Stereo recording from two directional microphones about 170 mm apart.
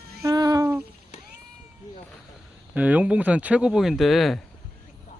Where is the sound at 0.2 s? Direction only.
20° right (ahead or behind).